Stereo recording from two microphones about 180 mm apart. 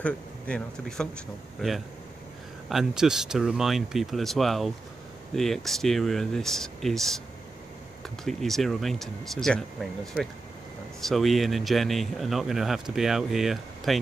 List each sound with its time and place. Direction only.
0.0 s speech: 5° left (ahead or behind)
8.2 s speech: centre (ahead or behind)